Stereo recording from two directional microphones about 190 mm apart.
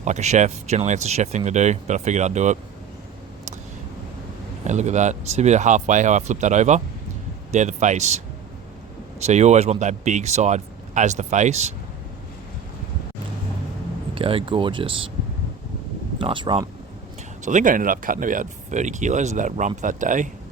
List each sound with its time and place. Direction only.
0.0 s speech: 35° right (ahead or behind)
4.6 s speech: 40° right (ahead or behind)
9.2 s speech: 35° right (ahead or behind)
14.2 s speech: 30° right (ahead or behind)
16.1 s speech: 25° right (ahead or behind)
17.4 s speech: 40° right (ahead or behind)